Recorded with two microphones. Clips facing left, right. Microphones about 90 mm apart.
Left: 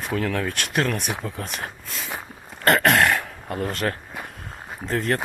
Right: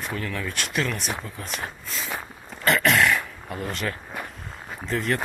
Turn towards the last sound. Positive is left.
turn(degrees=40)  # may be behind; listen again after turning